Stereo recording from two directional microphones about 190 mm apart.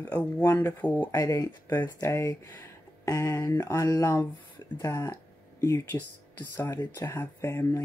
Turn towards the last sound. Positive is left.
turn(degrees=10)  # may be behind; listen again after turning